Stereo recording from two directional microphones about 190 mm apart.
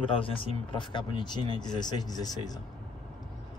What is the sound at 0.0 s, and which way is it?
Speech, 30° left (ahead or behind).